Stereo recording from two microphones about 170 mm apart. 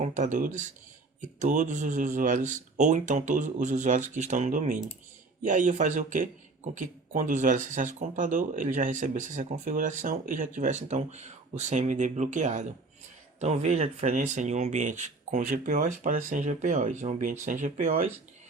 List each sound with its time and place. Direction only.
0.0 s speech: 45° right (ahead or behind)